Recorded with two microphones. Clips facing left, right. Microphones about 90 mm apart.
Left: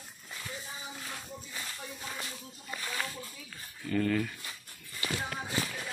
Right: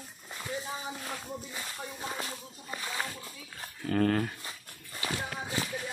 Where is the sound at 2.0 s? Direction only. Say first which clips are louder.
Right 5 dB; 30° right (ahead or behind).